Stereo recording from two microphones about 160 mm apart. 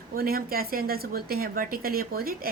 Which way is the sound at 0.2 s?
65° right (ahead or behind).